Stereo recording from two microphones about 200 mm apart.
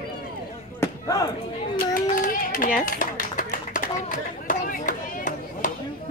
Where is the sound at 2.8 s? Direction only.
45° left (ahead or behind).